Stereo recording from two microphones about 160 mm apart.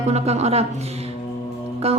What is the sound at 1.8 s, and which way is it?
Speech, 40° right (ahead or behind).